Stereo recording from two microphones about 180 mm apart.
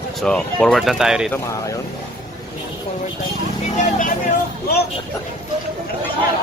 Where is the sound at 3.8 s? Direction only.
45° left (ahead or behind).